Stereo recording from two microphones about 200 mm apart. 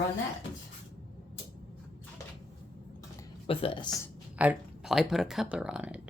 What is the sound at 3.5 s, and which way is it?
Speech, 25° left (ahead or behind).